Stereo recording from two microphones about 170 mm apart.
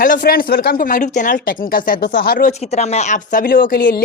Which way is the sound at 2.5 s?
40° left (ahead or behind).